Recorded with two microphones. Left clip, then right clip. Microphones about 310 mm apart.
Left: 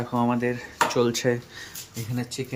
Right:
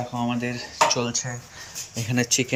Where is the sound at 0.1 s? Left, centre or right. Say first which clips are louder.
Left 3 dB; centre.